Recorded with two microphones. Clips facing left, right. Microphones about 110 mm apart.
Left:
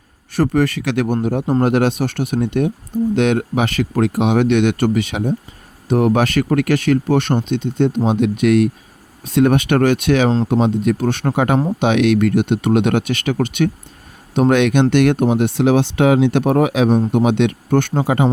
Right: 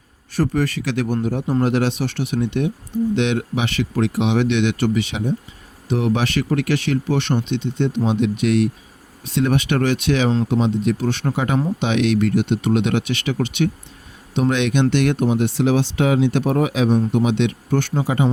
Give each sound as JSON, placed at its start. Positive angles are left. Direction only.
{"t": 0.3, "sound": "speech", "side_deg": 60}
{"t": 16.9, "sound": "speech", "side_deg": 45}